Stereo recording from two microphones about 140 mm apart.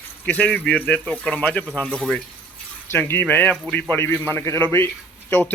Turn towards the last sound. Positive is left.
turn(degrees=10)  # may be behind; listen again after turning